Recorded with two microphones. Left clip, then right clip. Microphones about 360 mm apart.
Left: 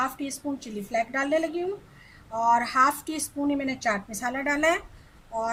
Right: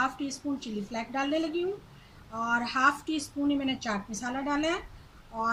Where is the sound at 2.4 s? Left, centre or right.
Left.